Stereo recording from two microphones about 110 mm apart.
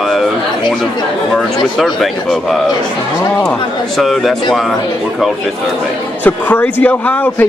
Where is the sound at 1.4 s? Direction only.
Centre (ahead or behind).